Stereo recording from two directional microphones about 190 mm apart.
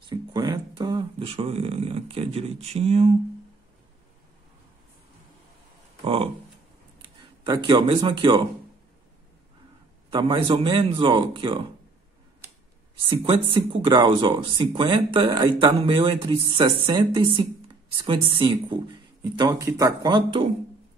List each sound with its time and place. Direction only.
0.1 s speech: 25° right (ahead or behind)
6.0 s speech: 30° right (ahead or behind)
10.1 s speech: 25° right (ahead or behind)
13.2 s speech: 25° right (ahead or behind)